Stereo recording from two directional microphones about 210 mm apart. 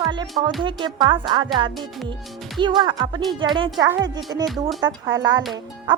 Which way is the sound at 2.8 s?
20° right (ahead or behind).